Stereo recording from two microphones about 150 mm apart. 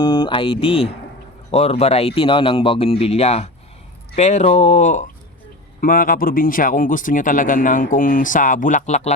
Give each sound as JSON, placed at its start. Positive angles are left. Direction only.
{"t": 0.0, "sound": "speech", "side_deg": 30}
{"t": 5.8, "sound": "speech", "side_deg": 70}